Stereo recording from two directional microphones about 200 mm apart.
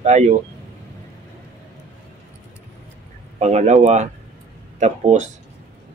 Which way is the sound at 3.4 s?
35° right (ahead or behind).